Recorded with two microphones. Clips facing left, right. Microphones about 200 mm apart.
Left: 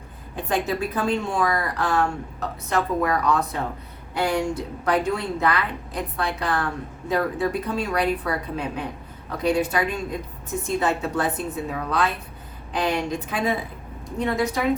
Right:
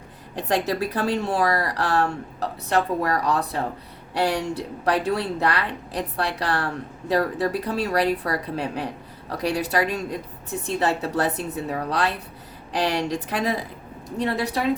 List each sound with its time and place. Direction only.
0.3 s a woman's voice: 40° right (ahead or behind)